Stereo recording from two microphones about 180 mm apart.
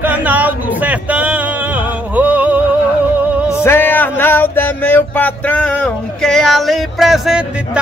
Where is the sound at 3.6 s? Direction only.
10° left (ahead or behind).